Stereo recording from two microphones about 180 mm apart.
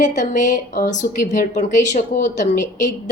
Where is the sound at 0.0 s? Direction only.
45° left (ahead or behind).